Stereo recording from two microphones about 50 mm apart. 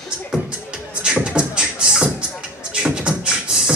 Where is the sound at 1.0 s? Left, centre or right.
Centre.